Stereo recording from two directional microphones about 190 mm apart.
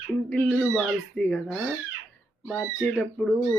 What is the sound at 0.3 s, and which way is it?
Speech, 10° left (ahead or behind).